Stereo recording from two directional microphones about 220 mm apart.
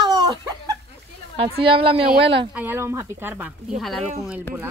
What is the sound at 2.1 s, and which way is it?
Speech, 50° right (ahead or behind).